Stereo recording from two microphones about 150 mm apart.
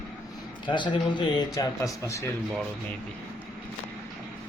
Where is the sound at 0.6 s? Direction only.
30° left (ahead or behind).